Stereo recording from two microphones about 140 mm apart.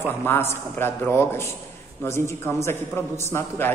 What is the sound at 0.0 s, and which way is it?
A man's voice, 15° left (ahead or behind).